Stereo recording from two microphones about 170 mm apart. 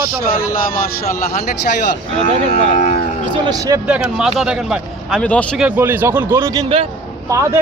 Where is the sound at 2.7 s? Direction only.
40° left (ahead or behind).